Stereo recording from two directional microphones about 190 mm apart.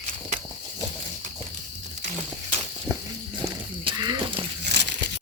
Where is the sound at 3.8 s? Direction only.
20° right (ahead or behind).